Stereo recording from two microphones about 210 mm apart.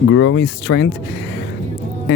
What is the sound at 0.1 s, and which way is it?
Speech, 70° left (ahead or behind).